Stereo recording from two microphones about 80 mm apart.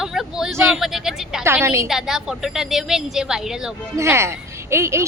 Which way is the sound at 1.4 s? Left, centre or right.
Right.